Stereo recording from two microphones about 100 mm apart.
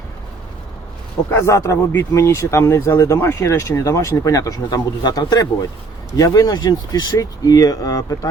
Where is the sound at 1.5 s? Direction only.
30° left (ahead or behind).